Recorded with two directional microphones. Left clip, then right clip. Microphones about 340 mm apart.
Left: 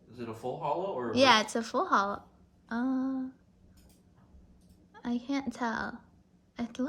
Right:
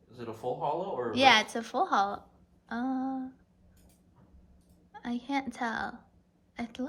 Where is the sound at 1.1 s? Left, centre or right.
Centre.